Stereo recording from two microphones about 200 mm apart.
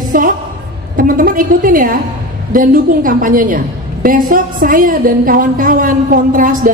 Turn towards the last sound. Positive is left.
turn(degrees=-40)  # may be behind; listen again after turning